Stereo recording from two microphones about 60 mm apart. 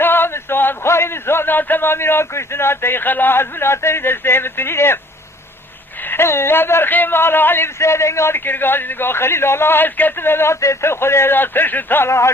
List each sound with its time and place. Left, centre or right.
0.0 s a man's voice: left
6.1 s a man's voice: left
7.8 s a man's voice: left
12.0 s speech: left